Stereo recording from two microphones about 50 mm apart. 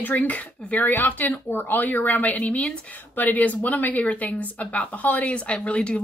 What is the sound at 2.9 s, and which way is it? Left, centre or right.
Speech, left.